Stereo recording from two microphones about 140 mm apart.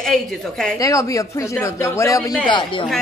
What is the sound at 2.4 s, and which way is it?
Speech, 35° left (ahead or behind).